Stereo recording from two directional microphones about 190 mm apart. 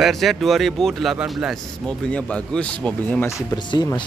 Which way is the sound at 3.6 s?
20° left (ahead or behind).